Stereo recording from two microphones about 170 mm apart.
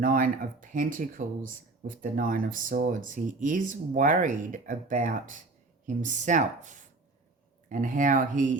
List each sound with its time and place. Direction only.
0.0 s speech: 55° right (ahead or behind)